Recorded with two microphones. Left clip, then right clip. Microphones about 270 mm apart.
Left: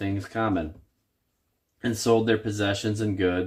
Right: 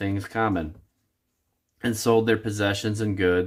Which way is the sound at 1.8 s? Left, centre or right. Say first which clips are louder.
Right 1 dB; centre.